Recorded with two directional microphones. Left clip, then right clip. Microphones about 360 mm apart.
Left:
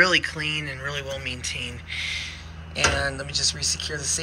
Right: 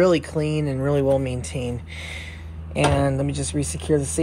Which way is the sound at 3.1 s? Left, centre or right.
Right.